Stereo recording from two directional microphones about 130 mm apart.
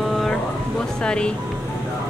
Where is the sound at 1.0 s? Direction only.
5° left (ahead or behind).